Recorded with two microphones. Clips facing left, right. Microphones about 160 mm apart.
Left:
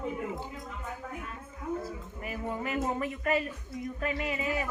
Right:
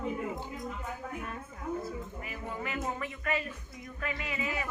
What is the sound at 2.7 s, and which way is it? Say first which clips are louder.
Speech: left 5 dB; 40° left (ahead or behind).